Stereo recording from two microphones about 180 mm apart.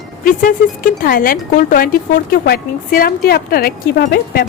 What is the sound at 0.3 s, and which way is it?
Speech, 50° left (ahead or behind).